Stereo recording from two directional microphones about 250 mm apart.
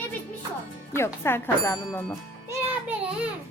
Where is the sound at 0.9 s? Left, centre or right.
Centre.